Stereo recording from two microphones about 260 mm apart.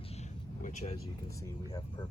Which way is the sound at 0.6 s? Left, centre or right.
Left.